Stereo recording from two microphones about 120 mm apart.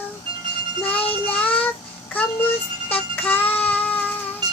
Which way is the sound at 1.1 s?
15° left (ahead or behind).